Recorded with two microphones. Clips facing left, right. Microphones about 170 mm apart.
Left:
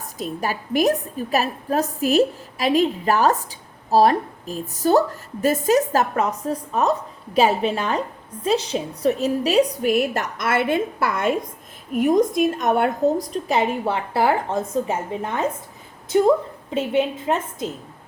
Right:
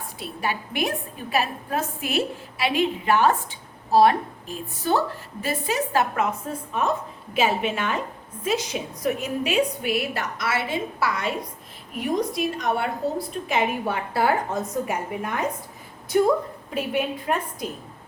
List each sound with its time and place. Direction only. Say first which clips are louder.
0.2 s a woman's voice: left 3 dB; 40° left (ahead or behind); by 17.7 s 25° left (ahead or behind)